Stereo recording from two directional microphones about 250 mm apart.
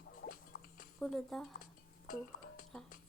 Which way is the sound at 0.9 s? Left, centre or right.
Centre.